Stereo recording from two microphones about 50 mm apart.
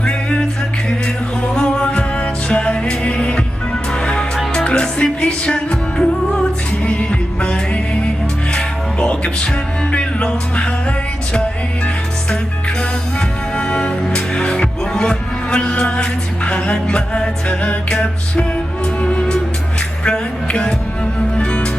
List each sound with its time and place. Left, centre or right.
0.0 s music: centre
6.8 s music: left
13.6 s music: left
18.9 s music: left